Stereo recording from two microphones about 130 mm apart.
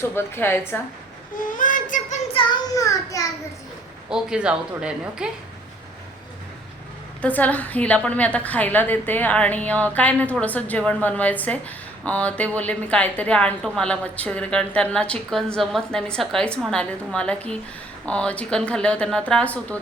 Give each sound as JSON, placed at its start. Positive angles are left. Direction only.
{"t": 0.0, "sound": "a woman's voice", "side_deg": 15}
{"t": 1.5, "sound": "child singing", "side_deg": 90}
{"t": 2.7, "sound": "a child's voice", "side_deg": 25}
{"t": 4.1, "sound": "speech", "side_deg": -5}
{"t": 7.2, "sound": "a woman's voice", "side_deg": 10}